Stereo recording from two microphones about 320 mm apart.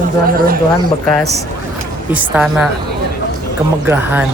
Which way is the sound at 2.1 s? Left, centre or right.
Centre.